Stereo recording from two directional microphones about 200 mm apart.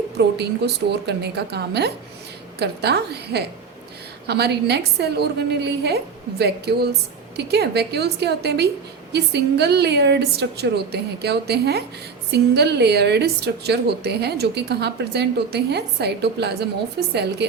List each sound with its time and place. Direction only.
0.3 s a woman's voice: 55° right (ahead or behind)